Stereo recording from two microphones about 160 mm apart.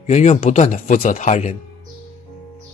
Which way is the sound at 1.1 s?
45° left (ahead or behind).